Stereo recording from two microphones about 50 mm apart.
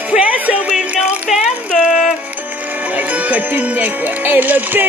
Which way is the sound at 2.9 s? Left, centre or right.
Right.